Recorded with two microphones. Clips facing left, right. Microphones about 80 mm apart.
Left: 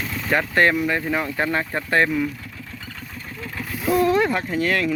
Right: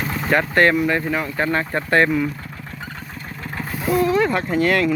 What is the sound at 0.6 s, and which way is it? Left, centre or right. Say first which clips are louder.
Speech: right 2 dB; centre.